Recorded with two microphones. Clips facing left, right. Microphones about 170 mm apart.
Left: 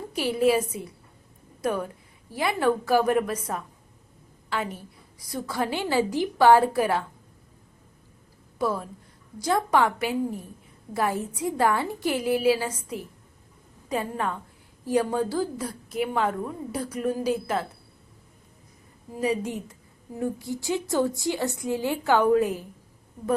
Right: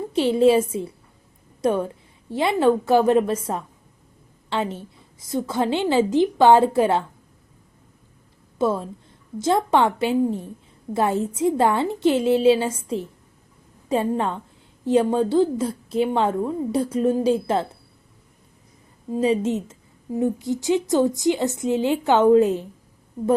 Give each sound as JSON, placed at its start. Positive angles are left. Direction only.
{"t": 0.1, "sound": "a woman's voice", "side_deg": -25}
{"t": 8.5, "sound": "a woman's voice", "side_deg": -25}
{"t": 19.1, "sound": "a woman's voice", "side_deg": -25}